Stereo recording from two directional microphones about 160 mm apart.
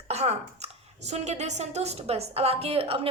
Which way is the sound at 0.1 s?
40° right (ahead or behind).